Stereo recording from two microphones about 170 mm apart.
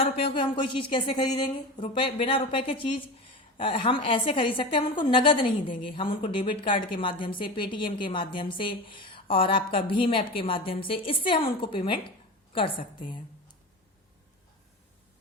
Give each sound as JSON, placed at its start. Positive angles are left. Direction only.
{"t": 0.0, "sound": "a woman's voice", "side_deg": 30}